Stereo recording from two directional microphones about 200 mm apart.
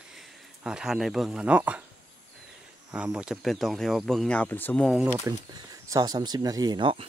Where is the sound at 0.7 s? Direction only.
5° right (ahead or behind).